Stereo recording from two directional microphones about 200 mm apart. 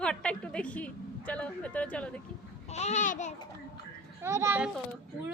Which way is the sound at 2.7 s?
35° left (ahead or behind).